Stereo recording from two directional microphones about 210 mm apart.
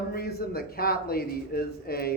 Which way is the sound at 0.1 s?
45° left (ahead or behind).